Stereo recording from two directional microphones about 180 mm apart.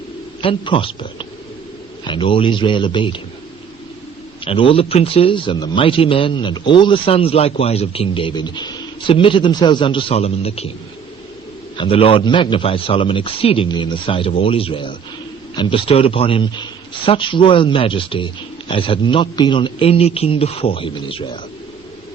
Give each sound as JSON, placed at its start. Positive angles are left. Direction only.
{"t": 0.4, "sound": "speech", "side_deg": 30}
{"t": 4.4, "sound": "speech", "side_deg": 30}
{"t": 11.8, "sound": "a man's voice", "side_deg": 30}